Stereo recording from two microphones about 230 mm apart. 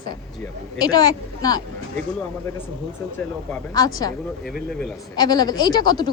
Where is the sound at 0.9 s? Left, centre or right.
Centre.